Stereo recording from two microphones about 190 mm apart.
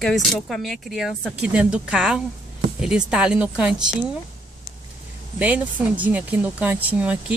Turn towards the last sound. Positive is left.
turn(degrees=-5)  # may be behind; listen again after turning